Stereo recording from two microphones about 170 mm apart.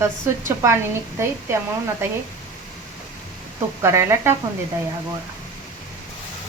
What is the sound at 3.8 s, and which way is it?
Speech, 15° right (ahead or behind).